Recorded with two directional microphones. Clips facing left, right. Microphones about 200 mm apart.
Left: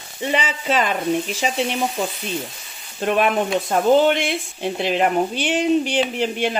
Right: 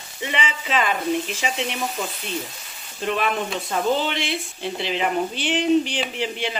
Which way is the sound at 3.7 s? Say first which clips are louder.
Left 7 dB; 50° left (ahead or behind).